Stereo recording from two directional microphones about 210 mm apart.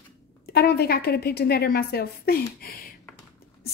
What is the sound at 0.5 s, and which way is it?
Speech, 50° left (ahead or behind).